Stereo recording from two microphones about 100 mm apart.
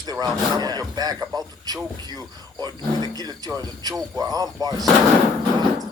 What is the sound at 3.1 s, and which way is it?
Speech, 40° right (ahead or behind).